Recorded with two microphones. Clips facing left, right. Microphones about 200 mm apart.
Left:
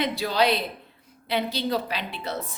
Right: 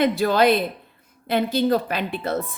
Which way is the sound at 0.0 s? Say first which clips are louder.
Right 6 dB; 50° right (ahead or behind).